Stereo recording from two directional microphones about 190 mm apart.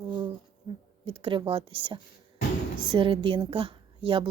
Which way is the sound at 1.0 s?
25° right (ahead or behind).